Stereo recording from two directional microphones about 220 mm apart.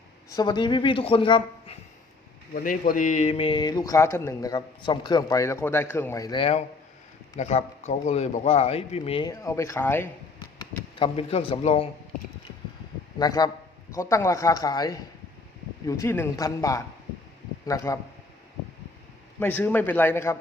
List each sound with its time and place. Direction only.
0.3 s a man's voice: 20° left (ahead or behind)
2.6 s a man's voice: 40° left (ahead or behind)
9.3 s speech: 15° left (ahead or behind)
10.6 s speech: 25° left (ahead or behind)
13.1 s speech: 20° left (ahead or behind)
19.4 s speech: 10° left (ahead or behind)